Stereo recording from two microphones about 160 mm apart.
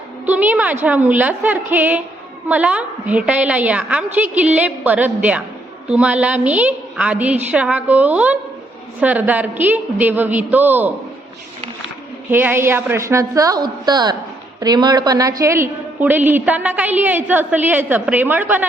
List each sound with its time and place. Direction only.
0.3 s a woman's voice: 10° right (ahead or behind)
12.3 s a woman's voice: 10° right (ahead or behind)